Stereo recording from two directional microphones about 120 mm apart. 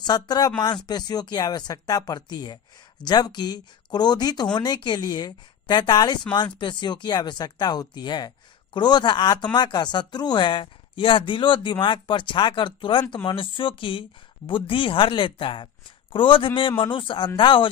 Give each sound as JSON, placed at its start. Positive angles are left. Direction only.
{"t": 0.0, "sound": "speech", "side_deg": 35}